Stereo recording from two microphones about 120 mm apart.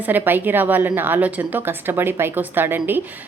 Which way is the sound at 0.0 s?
15° right (ahead or behind).